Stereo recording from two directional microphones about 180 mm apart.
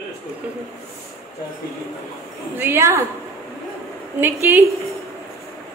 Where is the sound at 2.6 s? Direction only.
15° right (ahead or behind).